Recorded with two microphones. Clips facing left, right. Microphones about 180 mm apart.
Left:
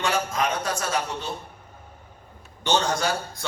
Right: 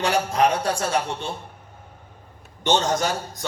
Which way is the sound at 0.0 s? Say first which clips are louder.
Right 5 dB; 35° right (ahead or behind).